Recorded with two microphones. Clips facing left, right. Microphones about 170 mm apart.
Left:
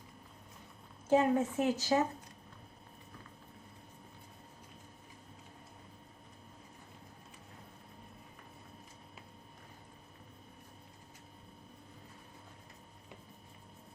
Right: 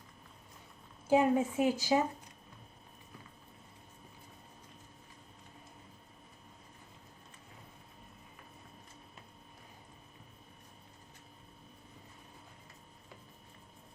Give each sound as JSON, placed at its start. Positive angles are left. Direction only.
{"t": 1.0, "sound": "a woman's voice", "side_deg": -10}